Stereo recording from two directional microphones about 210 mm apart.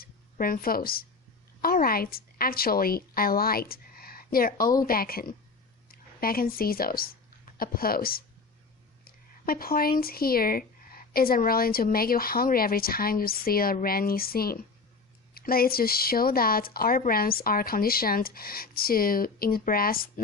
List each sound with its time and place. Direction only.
0.0 s a woman's voice: 45° left (ahead or behind)